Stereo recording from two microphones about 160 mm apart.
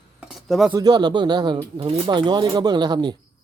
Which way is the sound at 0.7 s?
25° right (ahead or behind).